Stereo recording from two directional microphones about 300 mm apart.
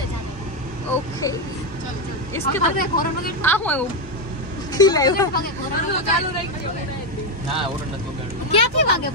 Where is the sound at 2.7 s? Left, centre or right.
Left.